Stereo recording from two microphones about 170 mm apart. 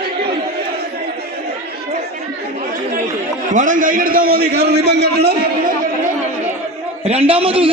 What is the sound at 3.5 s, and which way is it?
A man's voice, 50° right (ahead or behind).